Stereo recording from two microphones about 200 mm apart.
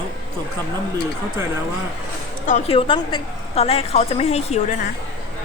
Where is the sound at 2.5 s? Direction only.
35° left (ahead or behind).